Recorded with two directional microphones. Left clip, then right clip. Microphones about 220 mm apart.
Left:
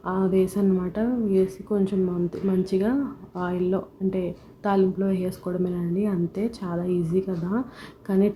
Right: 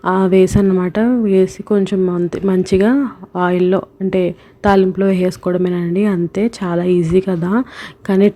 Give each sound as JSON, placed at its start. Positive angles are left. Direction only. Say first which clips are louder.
{"t": 0.0, "sound": "speech", "louder": "right 11 dB", "side_deg": -35}